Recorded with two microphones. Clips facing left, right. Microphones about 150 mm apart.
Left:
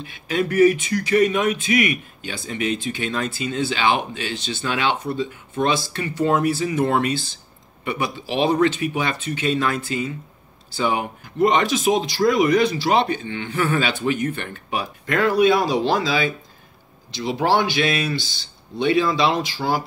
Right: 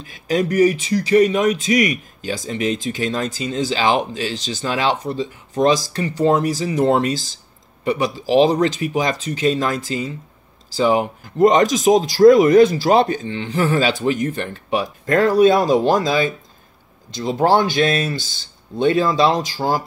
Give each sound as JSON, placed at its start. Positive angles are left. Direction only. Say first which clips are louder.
{"t": 0.0, "sound": "speech", "louder": "right 3 dB", "side_deg": -40}